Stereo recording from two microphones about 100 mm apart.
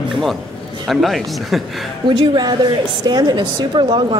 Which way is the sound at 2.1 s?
45° right (ahead or behind).